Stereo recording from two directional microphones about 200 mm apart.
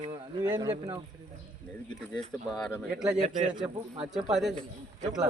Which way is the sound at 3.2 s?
40° right (ahead or behind).